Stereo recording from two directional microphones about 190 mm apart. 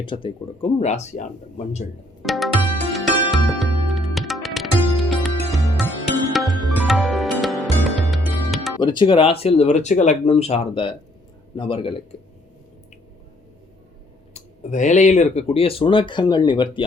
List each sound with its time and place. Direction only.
0.0 s speech: 25° left (ahead or behind)
2.2 s music: centre (ahead or behind)
8.8 s speech: 25° left (ahead or behind)
14.3 s speech: 40° left (ahead or behind); by 16.6 s 25° left (ahead or behind)